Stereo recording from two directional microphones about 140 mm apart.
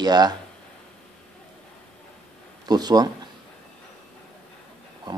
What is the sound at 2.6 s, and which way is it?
Speech, 30° right (ahead or behind).